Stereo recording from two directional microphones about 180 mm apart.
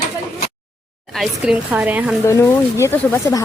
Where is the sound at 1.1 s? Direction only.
Centre (ahead or behind).